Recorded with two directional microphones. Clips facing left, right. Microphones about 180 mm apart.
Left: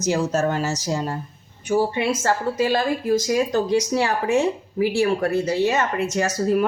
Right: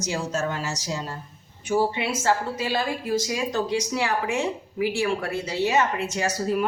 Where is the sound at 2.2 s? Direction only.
45° left (ahead or behind).